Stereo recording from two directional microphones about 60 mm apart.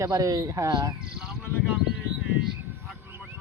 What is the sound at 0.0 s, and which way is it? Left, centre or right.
Speech, right.